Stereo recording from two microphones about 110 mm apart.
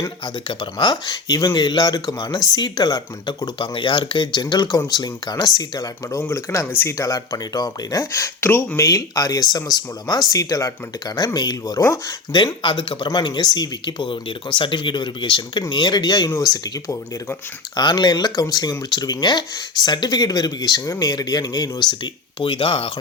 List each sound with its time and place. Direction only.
0.3 s speech: 45° left (ahead or behind)
8.4 s speech: 20° left (ahead or behind)
8.8 s speech: 30° left (ahead or behind); by 22.9 s 50° left (ahead or behind)